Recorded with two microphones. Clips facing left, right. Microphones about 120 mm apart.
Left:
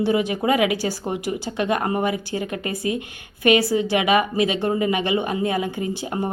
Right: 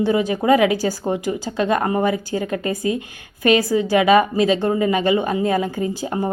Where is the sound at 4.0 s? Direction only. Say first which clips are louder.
Right 6 dB; 35° right (ahead or behind).